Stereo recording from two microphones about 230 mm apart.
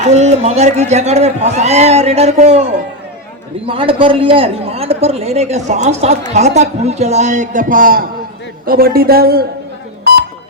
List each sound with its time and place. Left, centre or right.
0.0 s a man's voice: right
3.7 s a man's voice: right
10.1 s beep: right